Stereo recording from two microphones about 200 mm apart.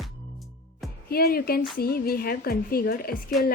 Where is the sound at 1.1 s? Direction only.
50° left (ahead or behind).